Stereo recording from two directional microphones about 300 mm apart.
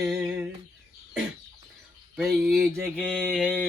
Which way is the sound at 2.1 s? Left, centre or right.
Centre.